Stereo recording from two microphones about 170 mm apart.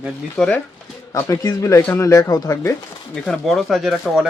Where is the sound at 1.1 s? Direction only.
20° left (ahead or behind).